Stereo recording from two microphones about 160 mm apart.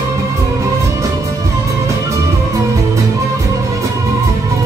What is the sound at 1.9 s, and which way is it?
Music, 20° right (ahead or behind).